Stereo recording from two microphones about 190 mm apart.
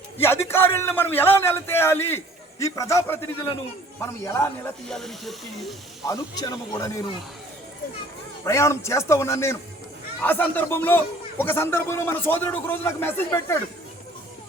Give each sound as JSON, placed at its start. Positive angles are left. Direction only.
{"t": 0.2, "sound": "speech", "side_deg": 15}
{"t": 4.9, "sound": "speech", "side_deg": 0}
{"t": 6.1, "sound": "speech", "side_deg": 20}
{"t": 8.4, "sound": "speech", "side_deg": 15}